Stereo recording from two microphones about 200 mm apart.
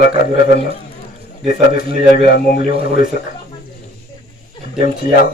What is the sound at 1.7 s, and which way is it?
Speech, 50° left (ahead or behind).